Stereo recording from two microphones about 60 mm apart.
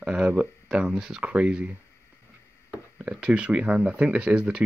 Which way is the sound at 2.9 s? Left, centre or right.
Centre.